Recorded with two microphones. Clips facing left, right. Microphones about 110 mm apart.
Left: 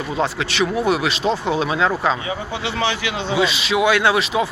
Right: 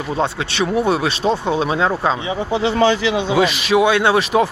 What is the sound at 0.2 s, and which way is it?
Speech, 30° right (ahead or behind).